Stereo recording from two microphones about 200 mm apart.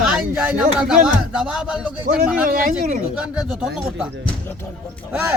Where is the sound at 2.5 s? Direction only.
45° right (ahead or behind).